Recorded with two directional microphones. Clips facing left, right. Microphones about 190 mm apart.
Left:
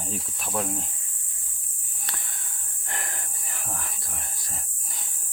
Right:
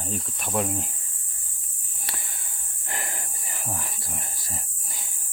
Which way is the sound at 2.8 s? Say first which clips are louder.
Right 2 dB; 5° right (ahead or behind).